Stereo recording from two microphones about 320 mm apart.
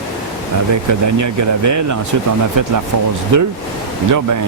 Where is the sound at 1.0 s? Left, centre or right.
Right.